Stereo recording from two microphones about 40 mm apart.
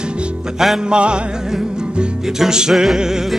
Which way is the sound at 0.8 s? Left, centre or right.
Right.